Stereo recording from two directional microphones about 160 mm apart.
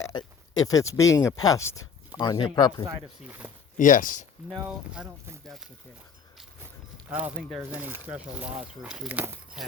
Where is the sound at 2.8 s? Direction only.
10° right (ahead or behind).